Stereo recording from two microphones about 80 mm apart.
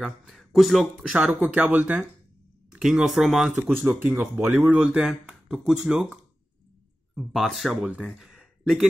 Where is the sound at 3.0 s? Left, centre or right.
Centre.